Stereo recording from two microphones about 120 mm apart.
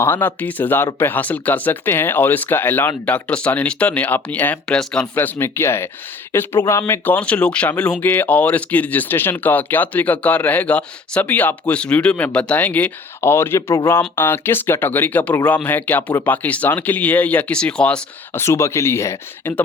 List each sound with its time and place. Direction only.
0.0 s speech: 15° left (ahead or behind)
5.1 s speech: 20° left (ahead or behind)
18.3 s speech: 20° left (ahead or behind)